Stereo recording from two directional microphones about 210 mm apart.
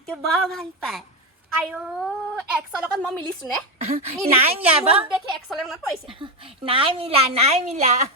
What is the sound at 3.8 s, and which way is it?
A woman's voice, 30° right (ahead or behind).